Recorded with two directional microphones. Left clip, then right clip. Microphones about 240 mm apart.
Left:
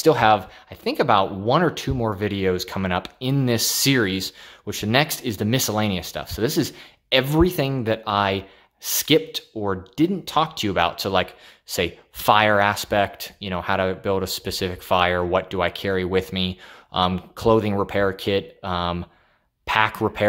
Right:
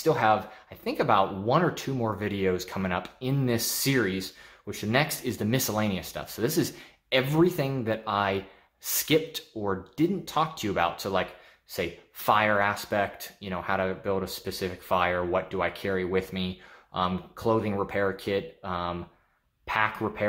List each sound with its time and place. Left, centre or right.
0.0 s speech: left